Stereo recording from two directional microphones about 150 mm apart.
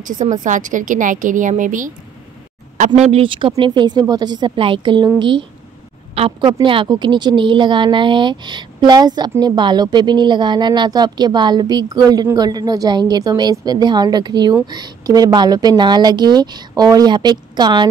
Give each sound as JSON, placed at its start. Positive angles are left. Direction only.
{"t": 0.0, "sound": "a woman's voice", "side_deg": -60}
{"t": 3.0, "sound": "a woman's voice", "side_deg": -40}